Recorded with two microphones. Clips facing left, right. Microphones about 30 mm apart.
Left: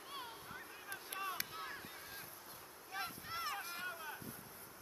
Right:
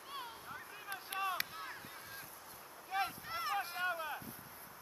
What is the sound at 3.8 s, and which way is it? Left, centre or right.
Boat, right.